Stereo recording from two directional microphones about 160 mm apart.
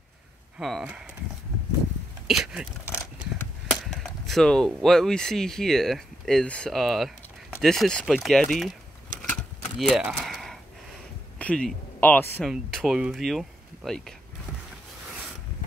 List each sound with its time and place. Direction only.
0.6 s speech: centre (ahead or behind)
2.2 s speech: centre (ahead or behind)
9.8 s speech: centre (ahead or behind)
12.4 s speech: centre (ahead or behind)